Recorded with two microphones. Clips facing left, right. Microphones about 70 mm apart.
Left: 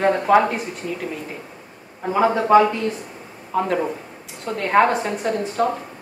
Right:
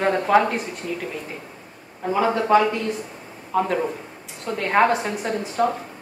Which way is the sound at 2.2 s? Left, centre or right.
Centre.